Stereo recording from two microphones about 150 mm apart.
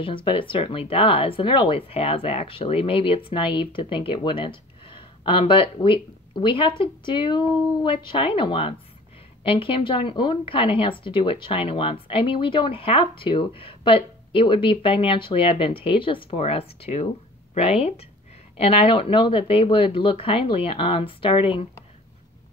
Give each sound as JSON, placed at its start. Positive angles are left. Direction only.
{"t": 0.0, "sound": "speech", "side_deg": 35}